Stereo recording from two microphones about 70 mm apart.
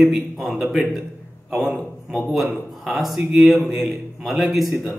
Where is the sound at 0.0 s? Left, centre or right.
Centre.